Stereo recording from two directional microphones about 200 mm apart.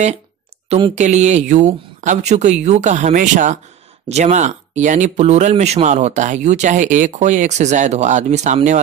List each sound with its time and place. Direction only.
0.7 s speech: 30° right (ahead or behind)